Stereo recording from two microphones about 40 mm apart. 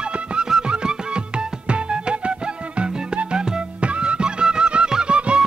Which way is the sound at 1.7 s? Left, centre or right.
Right.